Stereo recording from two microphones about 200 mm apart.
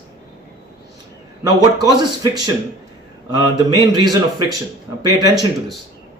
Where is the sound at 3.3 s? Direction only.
20° right (ahead or behind).